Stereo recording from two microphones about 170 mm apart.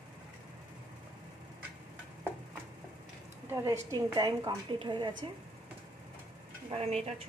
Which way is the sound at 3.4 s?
15° right (ahead or behind).